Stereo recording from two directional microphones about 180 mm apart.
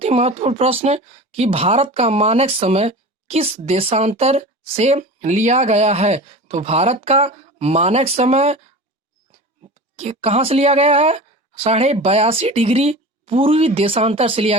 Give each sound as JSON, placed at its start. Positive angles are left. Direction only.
{"t": 0.0, "sound": "speech", "side_deg": -35}
{"t": 9.9, "sound": "speech", "side_deg": -35}